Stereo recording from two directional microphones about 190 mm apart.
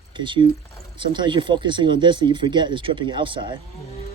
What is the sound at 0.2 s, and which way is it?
Speech, 25° right (ahead or behind).